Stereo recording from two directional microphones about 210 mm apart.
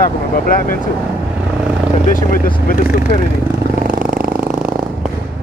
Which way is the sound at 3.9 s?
40° right (ahead or behind).